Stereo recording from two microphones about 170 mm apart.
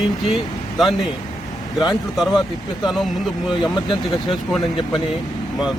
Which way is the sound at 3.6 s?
25° left (ahead or behind).